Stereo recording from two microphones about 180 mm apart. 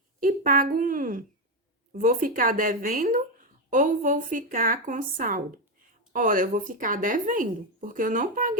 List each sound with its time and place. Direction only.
0.2 s speech: 50° right (ahead or behind)